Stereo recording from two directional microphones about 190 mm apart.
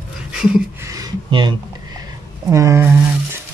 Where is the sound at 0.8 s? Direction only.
20° right (ahead or behind).